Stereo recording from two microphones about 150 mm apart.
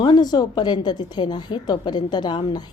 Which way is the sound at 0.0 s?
25° left (ahead or behind).